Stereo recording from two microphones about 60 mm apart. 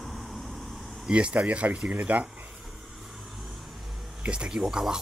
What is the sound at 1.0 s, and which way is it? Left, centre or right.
Speech, centre.